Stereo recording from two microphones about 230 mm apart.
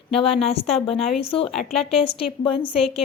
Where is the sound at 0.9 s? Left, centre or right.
Centre.